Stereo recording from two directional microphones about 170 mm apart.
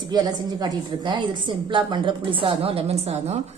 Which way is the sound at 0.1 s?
25° right (ahead or behind).